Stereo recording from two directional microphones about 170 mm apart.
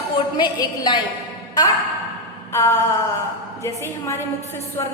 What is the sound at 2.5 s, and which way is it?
Speech, 15° left (ahead or behind).